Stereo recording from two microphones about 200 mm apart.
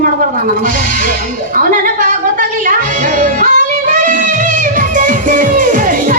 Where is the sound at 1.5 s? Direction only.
45° right (ahead or behind).